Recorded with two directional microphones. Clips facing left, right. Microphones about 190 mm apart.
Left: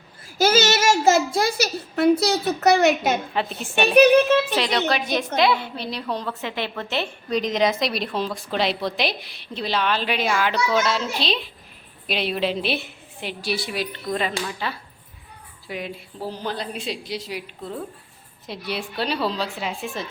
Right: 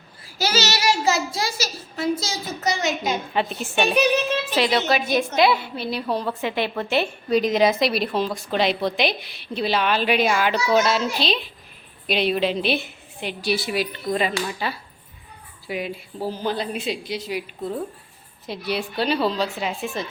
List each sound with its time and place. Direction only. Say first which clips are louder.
0.3 s a child's voice: left 5 dB; 50° left (ahead or behind)
4.5 s a woman's voice: right 2 dB; 5° right (ahead or behind)